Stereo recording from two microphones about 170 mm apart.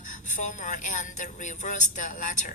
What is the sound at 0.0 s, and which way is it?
A woman's voice, 45° left (ahead or behind).